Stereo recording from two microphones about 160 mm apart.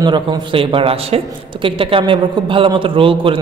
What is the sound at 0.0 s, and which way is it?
Speech, 30° right (ahead or behind).